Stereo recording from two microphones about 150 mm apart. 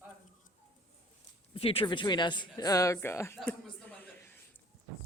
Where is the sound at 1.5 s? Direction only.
40° left (ahead or behind); by 3.4 s 15° left (ahead or behind).